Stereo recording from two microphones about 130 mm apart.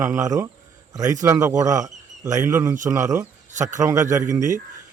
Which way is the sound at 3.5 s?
70° right (ahead or behind).